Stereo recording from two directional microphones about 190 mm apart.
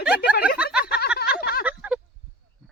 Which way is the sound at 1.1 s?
55° left (ahead or behind).